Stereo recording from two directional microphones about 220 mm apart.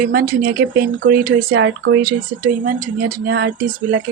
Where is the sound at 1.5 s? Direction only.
55° right (ahead or behind).